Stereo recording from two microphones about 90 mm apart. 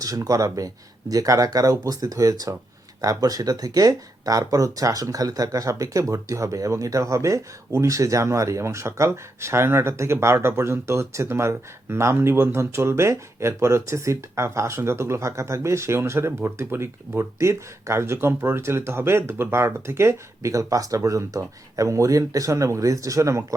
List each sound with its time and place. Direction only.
0.0 s speech: 40° right (ahead or behind)